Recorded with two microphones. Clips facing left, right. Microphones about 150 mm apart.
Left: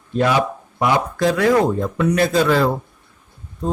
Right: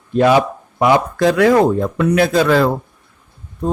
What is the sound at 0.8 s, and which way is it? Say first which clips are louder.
A man's voice: right 4 dB; 65° right (ahead or behind).